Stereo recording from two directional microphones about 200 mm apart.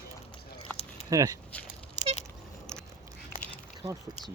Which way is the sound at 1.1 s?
15° right (ahead or behind).